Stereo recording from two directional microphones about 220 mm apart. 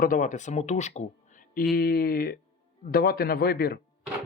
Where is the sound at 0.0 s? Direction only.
35° left (ahead or behind).